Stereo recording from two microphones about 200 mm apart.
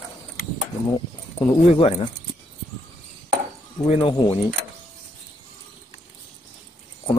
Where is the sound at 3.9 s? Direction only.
25° left (ahead or behind).